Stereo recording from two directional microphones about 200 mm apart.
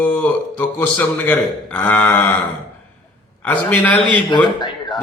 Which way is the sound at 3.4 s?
5° left (ahead or behind).